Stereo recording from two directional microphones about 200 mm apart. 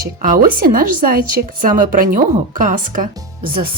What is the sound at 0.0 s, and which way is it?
Speech, 45° right (ahead or behind).